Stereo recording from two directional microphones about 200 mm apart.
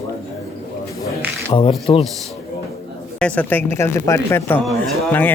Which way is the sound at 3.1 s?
5° left (ahead or behind).